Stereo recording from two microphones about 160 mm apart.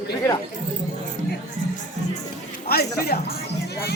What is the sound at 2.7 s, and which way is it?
Speech, 75° left (ahead or behind).